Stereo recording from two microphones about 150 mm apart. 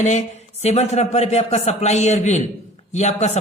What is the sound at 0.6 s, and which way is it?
Speech, 45° left (ahead or behind).